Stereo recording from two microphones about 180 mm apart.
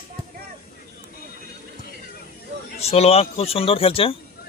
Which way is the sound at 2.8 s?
35° left (ahead or behind).